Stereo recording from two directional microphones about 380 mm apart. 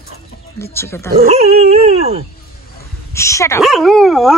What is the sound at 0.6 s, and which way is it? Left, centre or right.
Dog, centre.